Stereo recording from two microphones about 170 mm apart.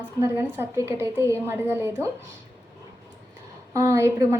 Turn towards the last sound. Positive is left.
turn(degrees=-15)  # may be behind; listen again after turning